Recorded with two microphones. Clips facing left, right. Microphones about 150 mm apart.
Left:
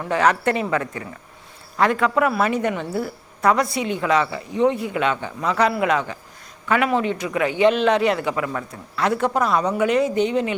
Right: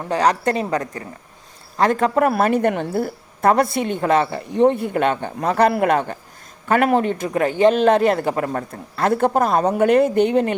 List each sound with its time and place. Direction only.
0.0 s a woman's voice: 35° right (ahead or behind); by 10.5 s 55° right (ahead or behind)